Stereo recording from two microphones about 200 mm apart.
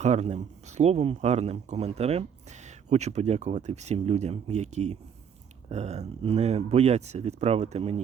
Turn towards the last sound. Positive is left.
turn(degrees=-30)  # may be behind; listen again after turning